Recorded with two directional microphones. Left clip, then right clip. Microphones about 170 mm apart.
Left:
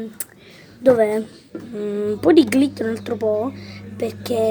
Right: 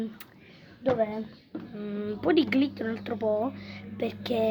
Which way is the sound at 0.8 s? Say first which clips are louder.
Left 12 dB; 70° left (ahead or behind).